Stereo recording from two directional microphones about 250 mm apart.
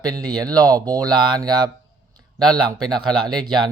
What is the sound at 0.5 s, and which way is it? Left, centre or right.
Speech, centre.